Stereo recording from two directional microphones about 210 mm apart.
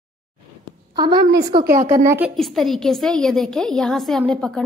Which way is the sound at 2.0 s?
10° right (ahead or behind).